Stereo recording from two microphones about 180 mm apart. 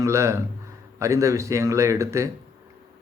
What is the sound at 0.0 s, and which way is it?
Speech, 15° right (ahead or behind).